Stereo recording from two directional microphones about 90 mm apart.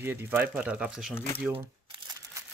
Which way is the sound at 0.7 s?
5° right (ahead or behind).